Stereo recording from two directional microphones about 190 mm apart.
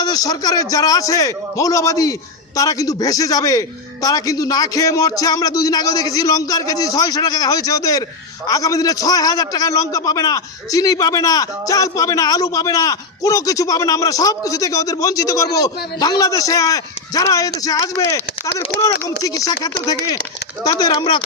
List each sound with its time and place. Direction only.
0.0 s a man's voice: 20° left (ahead or behind)